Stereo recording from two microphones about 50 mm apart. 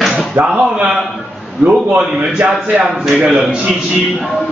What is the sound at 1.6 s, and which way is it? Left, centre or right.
Speech, right.